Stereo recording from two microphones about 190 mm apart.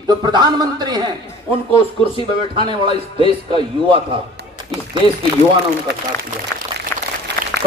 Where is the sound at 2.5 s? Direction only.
25° right (ahead or behind).